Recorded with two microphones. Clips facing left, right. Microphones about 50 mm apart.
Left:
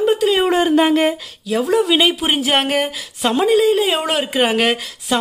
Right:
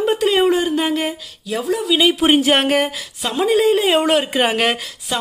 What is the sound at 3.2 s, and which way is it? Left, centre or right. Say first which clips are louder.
Speech: left 3 dB; centre.